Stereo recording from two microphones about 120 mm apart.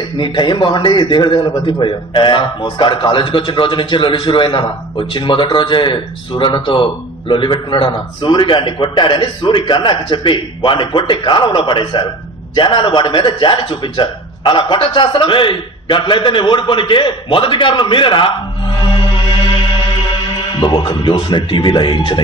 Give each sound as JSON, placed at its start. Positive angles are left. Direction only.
{"t": 0.2, "sound": "a man's voice", "side_deg": 40}
{"t": 20.5, "sound": "a man's voice", "side_deg": 40}